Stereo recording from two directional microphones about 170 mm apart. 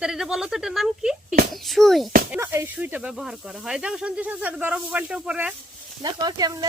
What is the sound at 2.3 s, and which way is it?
Speech, 15° right (ahead or behind).